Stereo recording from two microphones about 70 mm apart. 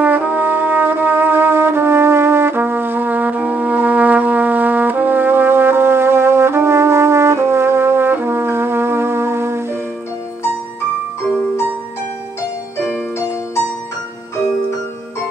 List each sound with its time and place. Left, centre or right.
0.0 s brass instrument: right